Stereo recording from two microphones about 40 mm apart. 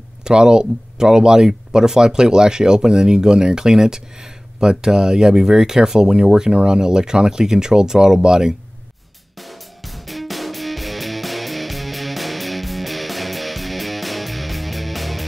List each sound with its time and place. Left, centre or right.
0.2 s speech: centre
9.4 s music: centre